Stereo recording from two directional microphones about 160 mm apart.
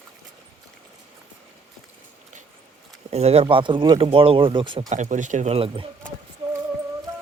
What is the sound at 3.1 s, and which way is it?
Speech, 40° right (ahead or behind).